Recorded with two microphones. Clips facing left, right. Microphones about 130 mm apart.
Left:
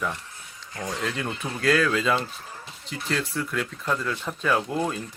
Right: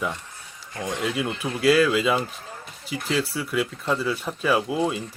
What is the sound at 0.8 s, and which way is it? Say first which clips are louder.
Speech: right 3 dB; 25° right (ahead or behind).